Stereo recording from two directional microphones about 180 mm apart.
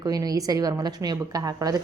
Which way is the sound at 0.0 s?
20° right (ahead or behind).